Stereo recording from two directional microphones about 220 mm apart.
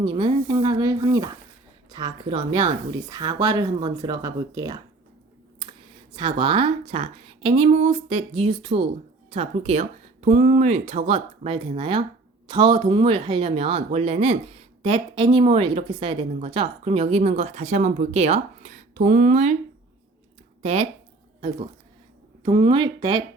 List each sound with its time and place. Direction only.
0.0 s speech: 20° right (ahead or behind)
6.1 s speech: 20° right (ahead or behind)
20.6 s speech: 30° right (ahead or behind)
22.4 s speech: 20° right (ahead or behind)